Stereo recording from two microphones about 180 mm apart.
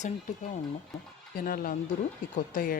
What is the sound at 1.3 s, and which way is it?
Speech, 55° left (ahead or behind).